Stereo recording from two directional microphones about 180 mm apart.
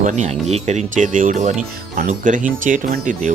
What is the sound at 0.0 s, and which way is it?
Speech, 40° right (ahead or behind).